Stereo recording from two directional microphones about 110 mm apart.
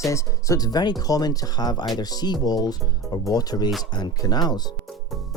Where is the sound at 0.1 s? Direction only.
30° left (ahead or behind).